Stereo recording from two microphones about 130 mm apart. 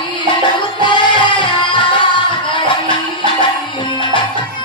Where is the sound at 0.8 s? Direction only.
35° left (ahead or behind).